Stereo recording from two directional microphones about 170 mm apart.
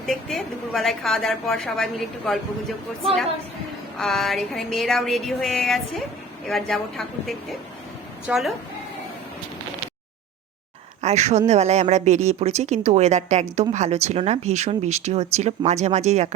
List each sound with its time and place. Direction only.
0.0 s a woman's voice: centre (ahead or behind)
3.9 s a woman's voice: centre (ahead or behind)
11.0 s speech: 40° right (ahead or behind)